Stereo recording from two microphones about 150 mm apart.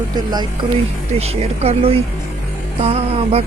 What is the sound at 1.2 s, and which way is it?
Speech, 40° right (ahead or behind).